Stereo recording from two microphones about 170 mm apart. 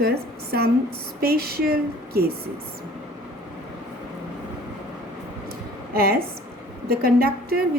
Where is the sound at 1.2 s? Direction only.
65° right (ahead or behind).